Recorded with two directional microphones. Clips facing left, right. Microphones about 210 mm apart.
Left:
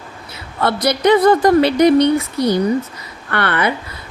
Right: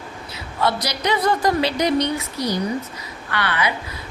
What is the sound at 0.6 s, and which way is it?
A woman's voice, 55° left (ahead or behind).